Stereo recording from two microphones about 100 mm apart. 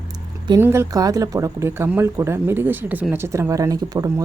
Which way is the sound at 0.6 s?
25° right (ahead or behind).